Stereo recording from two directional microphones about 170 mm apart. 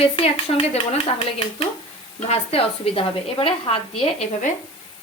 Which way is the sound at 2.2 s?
35° left (ahead or behind).